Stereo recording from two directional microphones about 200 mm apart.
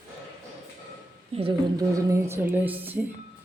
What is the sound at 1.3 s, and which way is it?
Speech, 25° right (ahead or behind).